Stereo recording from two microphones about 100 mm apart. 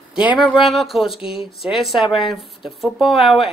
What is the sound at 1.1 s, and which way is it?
Speech, 70° left (ahead or behind).